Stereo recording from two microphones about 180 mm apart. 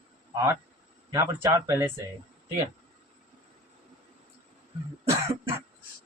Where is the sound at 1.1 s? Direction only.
15° right (ahead or behind).